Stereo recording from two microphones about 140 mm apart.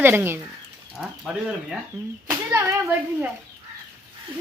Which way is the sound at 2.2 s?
20° right (ahead or behind).